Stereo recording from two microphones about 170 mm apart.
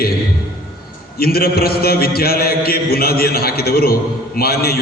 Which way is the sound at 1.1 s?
65° left (ahead or behind).